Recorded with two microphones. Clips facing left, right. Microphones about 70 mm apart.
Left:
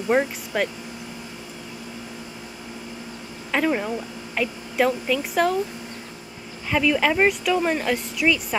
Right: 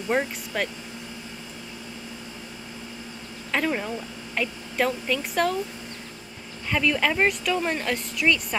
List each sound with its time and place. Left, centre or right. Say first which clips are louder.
0.1 s speech: left 4 dB; centre
3.5 s speech: left 3 dB; centre
6.7 s speech: left 3 dB; centre